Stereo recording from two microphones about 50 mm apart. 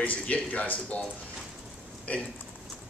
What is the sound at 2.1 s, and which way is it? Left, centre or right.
Speech, left.